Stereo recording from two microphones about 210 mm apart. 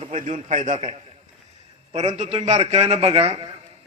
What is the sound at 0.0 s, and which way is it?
A man's voice, 35° right (ahead or behind).